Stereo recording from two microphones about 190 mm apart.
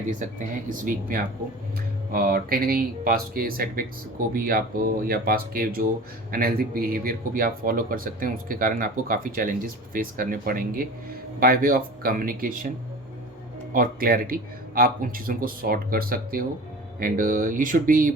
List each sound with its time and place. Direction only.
0.1 s speech: 45° right (ahead or behind)
13.7 s speech: 50° right (ahead or behind)